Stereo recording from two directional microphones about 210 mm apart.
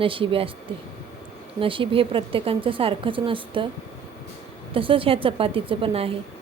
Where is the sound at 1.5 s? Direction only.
25° right (ahead or behind).